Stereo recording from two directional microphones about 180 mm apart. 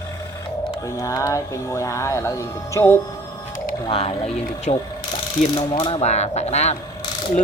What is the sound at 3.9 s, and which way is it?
Speech, 35° left (ahead or behind).